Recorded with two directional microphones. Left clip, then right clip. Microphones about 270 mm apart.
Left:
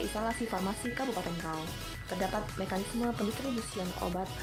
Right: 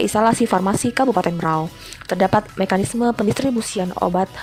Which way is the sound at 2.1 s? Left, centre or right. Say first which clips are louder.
Right 17 dB; right.